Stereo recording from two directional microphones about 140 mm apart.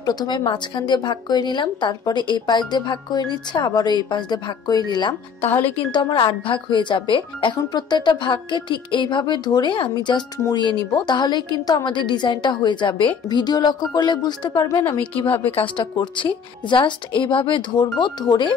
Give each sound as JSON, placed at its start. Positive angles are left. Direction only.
{"t": 0.0, "sound": "speech", "side_deg": 30}
{"t": 5.9, "sound": "speech", "side_deg": 35}
{"t": 15.2, "sound": "a woman's voice", "side_deg": 15}
{"t": 15.5, "sound": "speech", "side_deg": 35}